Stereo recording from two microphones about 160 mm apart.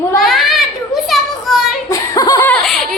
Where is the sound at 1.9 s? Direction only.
20° left (ahead or behind).